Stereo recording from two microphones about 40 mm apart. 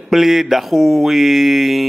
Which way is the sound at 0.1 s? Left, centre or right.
Centre.